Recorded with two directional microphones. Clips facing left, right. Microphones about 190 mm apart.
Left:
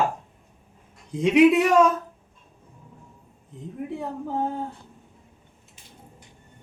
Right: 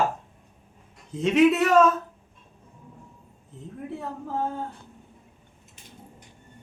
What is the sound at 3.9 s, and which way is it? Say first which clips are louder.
Speech: left 2 dB; 15° left (ahead or behind).